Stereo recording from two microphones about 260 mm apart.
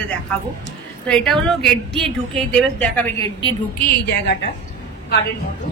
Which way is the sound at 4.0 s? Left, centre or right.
Left.